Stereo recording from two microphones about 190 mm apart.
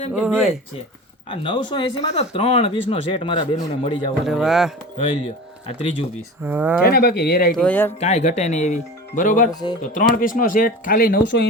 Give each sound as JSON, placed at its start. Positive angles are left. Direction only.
{"t": 0.1, "sound": "speech", "side_deg": -5}
{"t": 1.3, "sound": "speech", "side_deg": 25}
{"t": 4.3, "sound": "speech", "side_deg": 0}
{"t": 5.6, "sound": "speech", "side_deg": 35}
{"t": 6.4, "sound": "speech", "side_deg": -10}
{"t": 6.8, "sound": "speech", "side_deg": 55}
{"t": 7.5, "sound": "speech", "side_deg": 5}
{"t": 7.9, "sound": "speech", "side_deg": 35}
{"t": 9.5, "sound": "speech", "side_deg": 20}
{"t": 9.8, "sound": "speech", "side_deg": 45}